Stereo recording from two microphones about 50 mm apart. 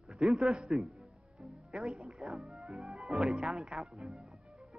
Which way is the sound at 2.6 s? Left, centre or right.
Centre.